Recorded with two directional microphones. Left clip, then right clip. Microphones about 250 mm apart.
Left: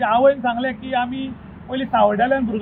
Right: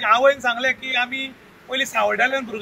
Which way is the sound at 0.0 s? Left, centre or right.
Right.